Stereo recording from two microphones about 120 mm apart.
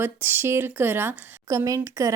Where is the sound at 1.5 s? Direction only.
25° right (ahead or behind).